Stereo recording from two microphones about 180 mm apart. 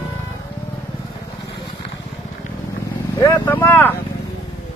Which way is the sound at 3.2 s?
15° left (ahead or behind).